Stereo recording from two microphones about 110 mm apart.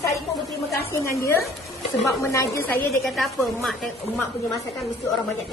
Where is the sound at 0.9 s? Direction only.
25° left (ahead or behind).